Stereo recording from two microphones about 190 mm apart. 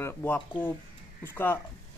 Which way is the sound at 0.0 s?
10° left (ahead or behind).